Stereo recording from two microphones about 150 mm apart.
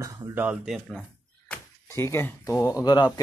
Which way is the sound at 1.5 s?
15° left (ahead or behind).